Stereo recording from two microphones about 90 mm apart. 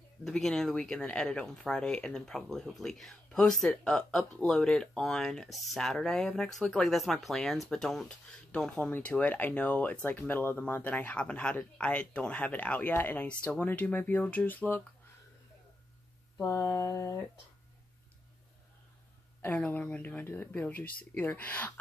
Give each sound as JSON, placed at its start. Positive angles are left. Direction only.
{"t": 0.2, "sound": "speech", "side_deg": 5}
{"t": 16.3, "sound": "speech", "side_deg": 35}
{"t": 19.4, "sound": "speech", "side_deg": 20}